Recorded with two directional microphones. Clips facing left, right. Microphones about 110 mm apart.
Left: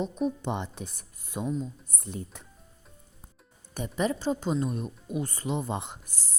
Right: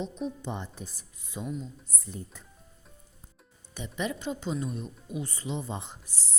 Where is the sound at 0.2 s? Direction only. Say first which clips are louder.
Left 5 dB; 65° left (ahead or behind).